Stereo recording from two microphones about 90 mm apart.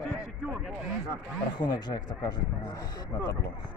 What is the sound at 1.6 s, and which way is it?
Speech, 60° left (ahead or behind).